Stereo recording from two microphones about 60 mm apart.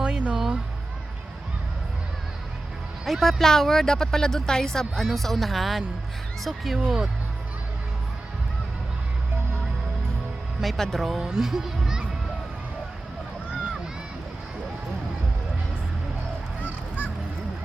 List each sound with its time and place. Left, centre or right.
0.0 s a sound: centre
3.0 s speech: centre
6.7 s a child's voice: centre
10.6 s a child's voice: centre